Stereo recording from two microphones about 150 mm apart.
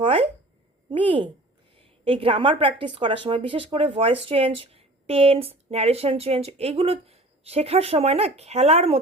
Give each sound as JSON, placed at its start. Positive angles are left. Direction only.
{"t": 0.0, "sound": "speech", "side_deg": -35}
{"t": 1.7, "sound": "a woman's voice", "side_deg": -35}